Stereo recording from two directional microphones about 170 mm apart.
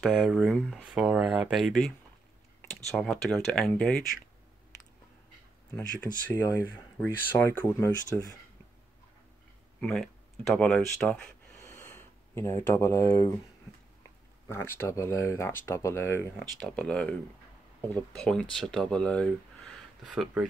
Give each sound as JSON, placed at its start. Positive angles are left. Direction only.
{"t": 0.0, "sound": "speech", "side_deg": 0}
{"t": 2.9, "sound": "speech", "side_deg": 0}
{"t": 6.3, "sound": "speech", "side_deg": 15}
{"t": 9.8, "sound": "speech", "side_deg": 0}
{"t": 14.5, "sound": "speech", "side_deg": 15}
{"t": 16.3, "sound": "speech", "side_deg": 5}